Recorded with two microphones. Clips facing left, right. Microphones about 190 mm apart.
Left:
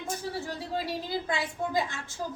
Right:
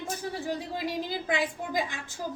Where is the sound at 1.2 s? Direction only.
15° right (ahead or behind).